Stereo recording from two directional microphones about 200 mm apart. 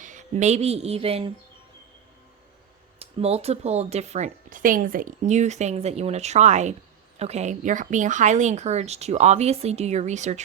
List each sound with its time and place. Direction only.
0.0 s a woman's voice: 40° right (ahead or behind)
3.0 s speech: 30° right (ahead or behind)